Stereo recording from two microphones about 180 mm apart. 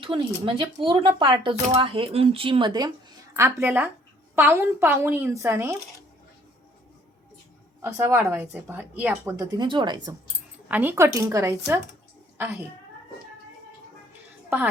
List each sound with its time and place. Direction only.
0.1 s speech: 30° right (ahead or behind)
3.3 s speech: 15° right (ahead or behind)
7.8 s speech: 15° right (ahead or behind)
10.7 s speech: 10° right (ahead or behind)
14.5 s speech: 10° right (ahead or behind)